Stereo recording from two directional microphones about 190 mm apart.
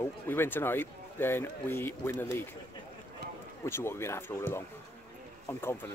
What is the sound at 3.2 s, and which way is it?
Run, 60° right (ahead or behind).